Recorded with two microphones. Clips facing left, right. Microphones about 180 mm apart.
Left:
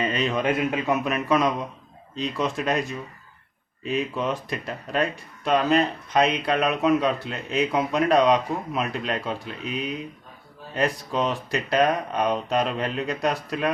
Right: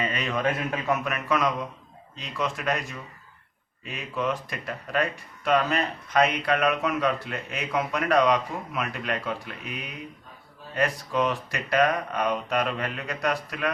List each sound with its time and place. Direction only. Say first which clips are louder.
0.0 s speech: left 3 dB; 25° left (ahead or behind)
3.8 s speech: left 4 dB; 25° left (ahead or behind)
10.8 s speech: left 1 dB; 25° left (ahead or behind)